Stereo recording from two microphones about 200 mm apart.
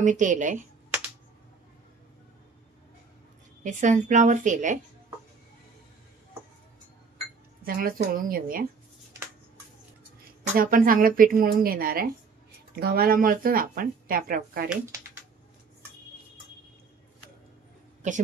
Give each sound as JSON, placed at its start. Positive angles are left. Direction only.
{"t": 0.0, "sound": "a woman's voice", "side_deg": -40}
{"t": 3.6, "sound": "a woman's voice", "side_deg": -40}
{"t": 7.6, "sound": "speech", "side_deg": -45}
{"t": 10.6, "sound": "speech", "side_deg": -45}